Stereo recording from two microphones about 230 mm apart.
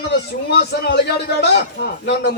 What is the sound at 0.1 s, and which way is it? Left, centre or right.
A man's voice, left.